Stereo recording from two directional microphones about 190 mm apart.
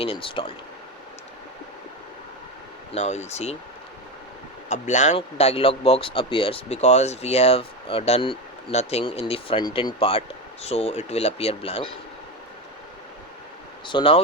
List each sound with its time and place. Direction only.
0.0 s speech: 30° left (ahead or behind)
2.9 s speech: 35° left (ahead or behind)
4.7 s speech: 40° left (ahead or behind)
13.8 s speech: 25° left (ahead or behind)